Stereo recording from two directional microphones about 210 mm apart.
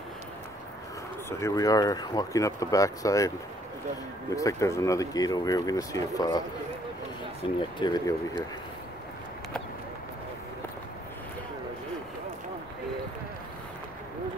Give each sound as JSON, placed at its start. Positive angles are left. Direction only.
{"t": 1.4, "sound": "speech", "side_deg": 15}
{"t": 4.4, "sound": "speech", "side_deg": 15}
{"t": 7.4, "sound": "speech", "side_deg": 25}